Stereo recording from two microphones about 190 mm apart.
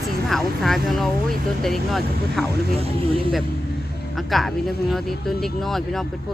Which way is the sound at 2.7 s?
30° right (ahead or behind).